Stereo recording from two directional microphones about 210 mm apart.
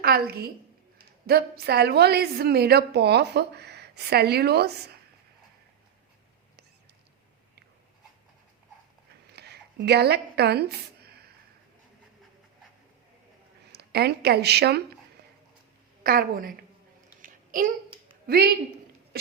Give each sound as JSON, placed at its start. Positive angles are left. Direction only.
{"t": 0.0, "sound": "a woman's voice", "side_deg": -45}
{"t": 9.3, "sound": "a sound", "side_deg": -50}
{"t": 13.7, "sound": "speech", "side_deg": -50}
{"t": 16.0, "sound": "a woman's voice", "side_deg": -45}
{"t": 17.2, "sound": "a sound", "side_deg": -40}
{"t": 18.3, "sound": "a woman's voice", "side_deg": -50}